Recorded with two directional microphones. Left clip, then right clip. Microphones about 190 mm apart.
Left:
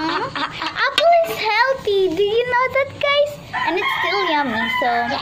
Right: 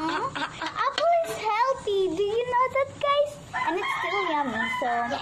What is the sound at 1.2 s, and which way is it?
Child singing, 20° left (ahead or behind).